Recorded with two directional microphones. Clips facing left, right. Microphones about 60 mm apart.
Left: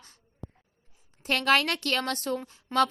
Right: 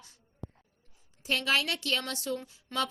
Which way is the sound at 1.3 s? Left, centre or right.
Left.